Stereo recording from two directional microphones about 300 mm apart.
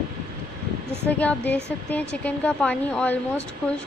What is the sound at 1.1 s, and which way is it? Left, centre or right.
Speech, centre.